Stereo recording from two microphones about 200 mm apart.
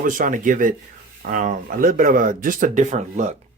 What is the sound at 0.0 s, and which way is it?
Speech, 40° right (ahead or behind).